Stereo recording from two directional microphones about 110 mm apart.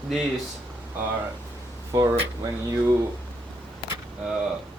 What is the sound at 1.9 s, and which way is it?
Speech, 30° right (ahead or behind).